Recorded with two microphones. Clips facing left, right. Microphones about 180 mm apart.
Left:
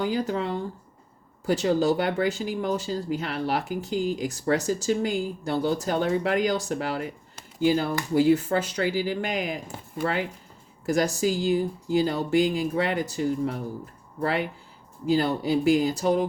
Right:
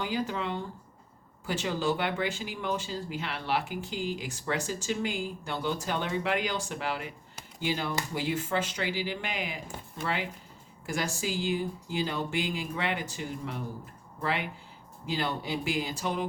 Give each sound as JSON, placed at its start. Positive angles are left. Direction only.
{"t": 0.0, "sound": "speech", "side_deg": 40}